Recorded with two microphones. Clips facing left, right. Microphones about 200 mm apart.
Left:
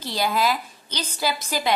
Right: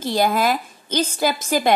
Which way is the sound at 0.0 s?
50° right (ahead or behind).